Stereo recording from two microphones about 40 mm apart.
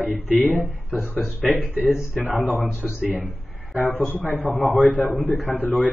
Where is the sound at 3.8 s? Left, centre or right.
Left.